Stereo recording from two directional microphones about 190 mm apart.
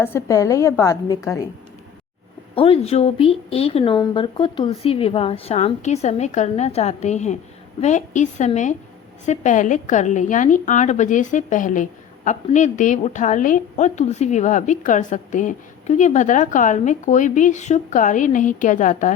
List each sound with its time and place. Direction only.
0.0 s a woman's voice: 15° left (ahead or behind)
2.6 s a woman's voice: 30° left (ahead or behind)